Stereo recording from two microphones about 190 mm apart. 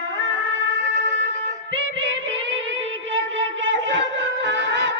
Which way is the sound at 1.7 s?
80° right.